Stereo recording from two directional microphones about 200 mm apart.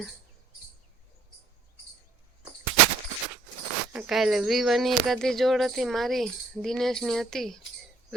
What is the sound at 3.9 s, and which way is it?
Speech, centre (ahead or behind).